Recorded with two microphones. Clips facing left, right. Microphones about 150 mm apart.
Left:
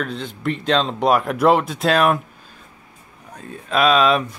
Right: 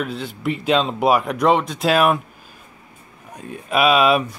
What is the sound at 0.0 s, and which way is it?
Speech, 5° right (ahead or behind).